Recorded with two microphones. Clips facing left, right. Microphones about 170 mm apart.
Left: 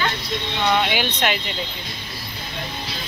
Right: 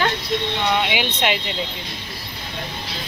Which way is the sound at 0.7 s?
20° right (ahead or behind).